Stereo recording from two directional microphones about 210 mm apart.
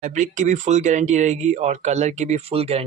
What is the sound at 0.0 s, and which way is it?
Speech, 35° right (ahead or behind).